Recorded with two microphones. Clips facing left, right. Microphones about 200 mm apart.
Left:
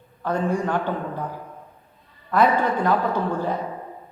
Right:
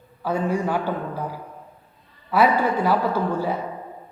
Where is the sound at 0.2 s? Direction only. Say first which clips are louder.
Even; 5° right (ahead or behind).